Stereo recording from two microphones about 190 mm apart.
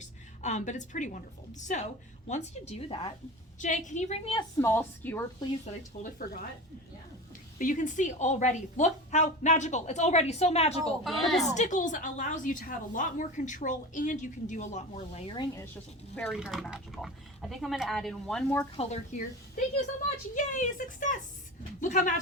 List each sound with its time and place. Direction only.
0.0 s a woman's voice: 40° left (ahead or behind)
4.6 s speech: 10° left (ahead or behind)
7.6 s a woman's voice: 45° left (ahead or behind)
11.0 s speech: centre (ahead or behind)
11.5 s a woman's voice: 40° left (ahead or behind)
15.4 s speech: 15° left (ahead or behind)
18.8 s a woman's voice: 40° left (ahead or behind)